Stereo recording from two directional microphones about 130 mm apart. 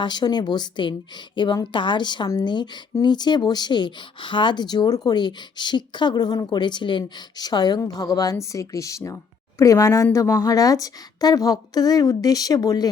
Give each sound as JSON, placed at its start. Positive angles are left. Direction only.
{"t": 0.0, "sound": "a woman's voice", "side_deg": 35}